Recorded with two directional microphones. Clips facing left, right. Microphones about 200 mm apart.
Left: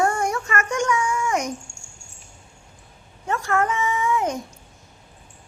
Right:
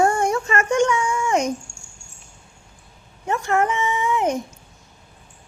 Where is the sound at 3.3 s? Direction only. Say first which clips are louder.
Right 2 dB; 20° right (ahead or behind).